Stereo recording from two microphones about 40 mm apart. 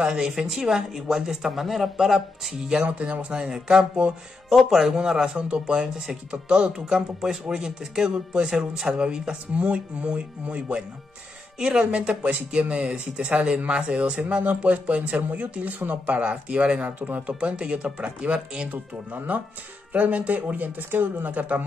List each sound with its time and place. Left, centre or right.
0.0 s a man's voice: centre
2.8 s speech: right
3.3 s speech: centre
4.5 s a man's voice: centre; by 10.8 s right
11.6 s speech: right
12.2 s speech: right
15.8 s speech: right
16.2 s speech: right
16.8 s speech: right
17.3 s speech: right
21.3 s speech: right